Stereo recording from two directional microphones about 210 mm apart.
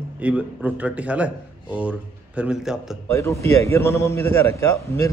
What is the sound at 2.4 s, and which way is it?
Speech, 5° right (ahead or behind).